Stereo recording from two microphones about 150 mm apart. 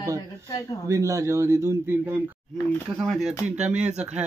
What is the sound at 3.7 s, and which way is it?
Speech, 10° right (ahead or behind).